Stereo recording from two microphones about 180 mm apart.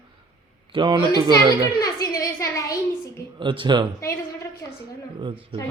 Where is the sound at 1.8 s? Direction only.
20° left (ahead or behind).